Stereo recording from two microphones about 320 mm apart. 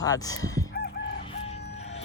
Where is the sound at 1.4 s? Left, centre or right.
Centre.